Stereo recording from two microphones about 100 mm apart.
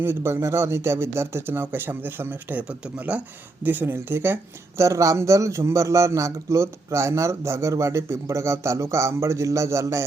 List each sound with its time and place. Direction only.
0.0 s a man's voice: 25° right (ahead or behind)